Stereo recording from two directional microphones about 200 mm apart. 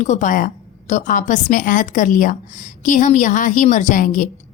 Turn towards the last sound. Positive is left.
turn(degrees=40)  # may be behind; listen again after turning